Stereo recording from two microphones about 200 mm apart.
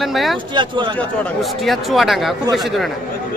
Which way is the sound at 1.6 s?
Centre (ahead or behind).